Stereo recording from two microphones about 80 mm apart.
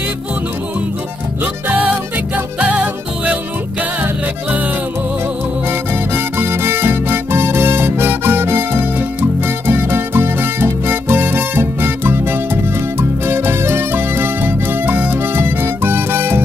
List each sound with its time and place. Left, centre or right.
1.4 s music: right
5.7 s music: right